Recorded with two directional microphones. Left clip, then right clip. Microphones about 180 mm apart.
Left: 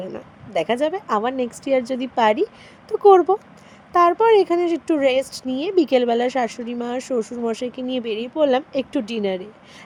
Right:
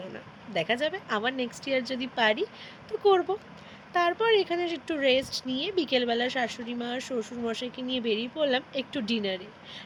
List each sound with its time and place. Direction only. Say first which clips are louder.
0.1 s speech: left 8 dB; 40° left (ahead or behind)